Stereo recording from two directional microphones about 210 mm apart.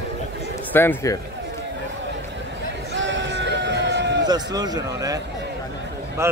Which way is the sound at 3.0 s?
60° right (ahead or behind).